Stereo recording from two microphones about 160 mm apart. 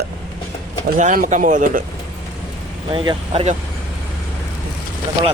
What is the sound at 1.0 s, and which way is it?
Speech, 55° right (ahead or behind).